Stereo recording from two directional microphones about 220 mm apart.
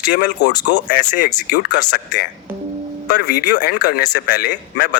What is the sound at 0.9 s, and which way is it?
Speech, 35° left (ahead or behind).